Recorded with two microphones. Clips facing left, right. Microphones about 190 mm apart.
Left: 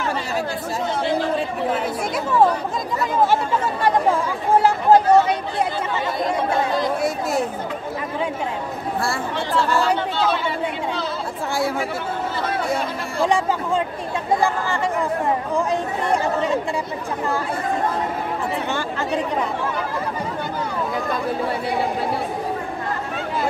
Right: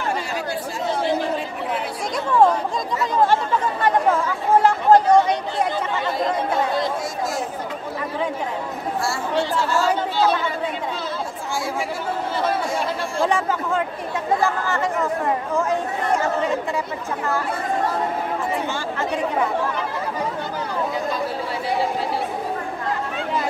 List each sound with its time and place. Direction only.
4.6 s chatter: 10° left (ahead or behind)
7.0 s chatter: 65° left (ahead or behind)
9.0 s chatter: 55° left (ahead or behind)